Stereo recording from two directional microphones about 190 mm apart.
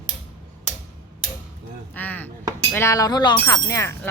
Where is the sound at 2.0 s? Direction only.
10° left (ahead or behind).